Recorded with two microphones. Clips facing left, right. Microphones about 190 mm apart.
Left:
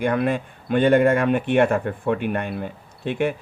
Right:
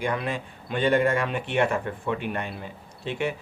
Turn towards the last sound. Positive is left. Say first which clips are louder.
# left 5 dB
turn(degrees=55)  # may be behind; listen again after turning